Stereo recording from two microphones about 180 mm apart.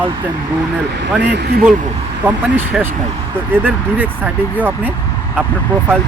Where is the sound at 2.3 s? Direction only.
10° right (ahead or behind).